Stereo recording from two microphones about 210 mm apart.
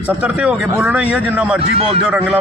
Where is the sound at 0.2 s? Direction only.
5° right (ahead or behind).